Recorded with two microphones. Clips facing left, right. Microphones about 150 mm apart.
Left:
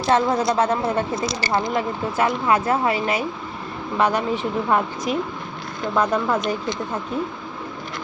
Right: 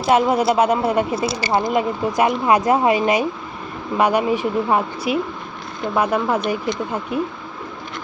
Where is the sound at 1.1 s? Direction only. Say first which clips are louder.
Right 3 dB; 30° right (ahead or behind).